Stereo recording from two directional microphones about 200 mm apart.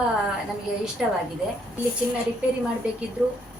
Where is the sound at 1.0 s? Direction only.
Centre (ahead or behind).